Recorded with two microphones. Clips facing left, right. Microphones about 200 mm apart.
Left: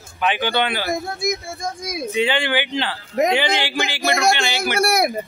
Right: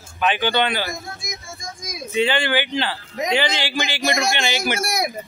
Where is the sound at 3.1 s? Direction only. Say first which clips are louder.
Left 6 dB; 55° left (ahead or behind).